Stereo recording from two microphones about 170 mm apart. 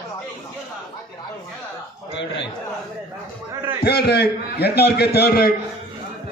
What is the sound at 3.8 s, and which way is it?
A man's voice, 70° left (ahead or behind).